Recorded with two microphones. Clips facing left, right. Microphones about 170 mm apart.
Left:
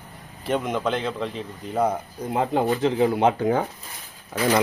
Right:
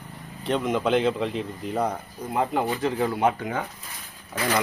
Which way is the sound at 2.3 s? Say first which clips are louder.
Left 3 dB; 25° left (ahead or behind).